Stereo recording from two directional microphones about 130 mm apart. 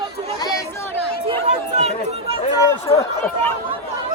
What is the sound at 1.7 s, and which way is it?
Chatter, 60° right (ahead or behind).